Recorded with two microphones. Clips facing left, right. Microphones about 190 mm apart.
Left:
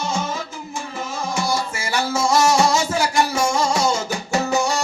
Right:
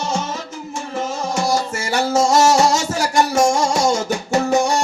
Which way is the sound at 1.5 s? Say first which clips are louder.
Right 4 dB; 45° right (ahead or behind).